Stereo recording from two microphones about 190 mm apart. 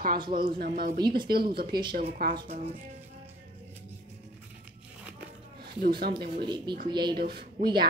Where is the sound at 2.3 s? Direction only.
30° right (ahead or behind).